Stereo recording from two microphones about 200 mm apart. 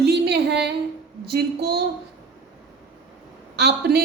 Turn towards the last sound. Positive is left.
turn(degrees=-55)  # may be behind; listen again after turning